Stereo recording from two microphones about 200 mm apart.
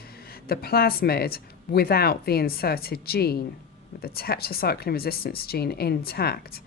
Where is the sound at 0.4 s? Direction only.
50° left (ahead or behind).